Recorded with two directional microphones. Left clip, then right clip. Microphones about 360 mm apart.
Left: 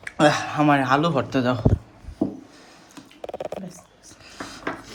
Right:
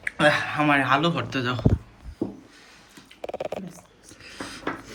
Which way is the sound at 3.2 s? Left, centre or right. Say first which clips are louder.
Even; left.